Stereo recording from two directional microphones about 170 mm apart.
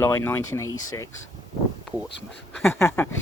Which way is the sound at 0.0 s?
15° left (ahead or behind).